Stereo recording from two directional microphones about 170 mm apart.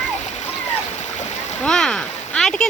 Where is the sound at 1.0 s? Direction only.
45° left (ahead or behind).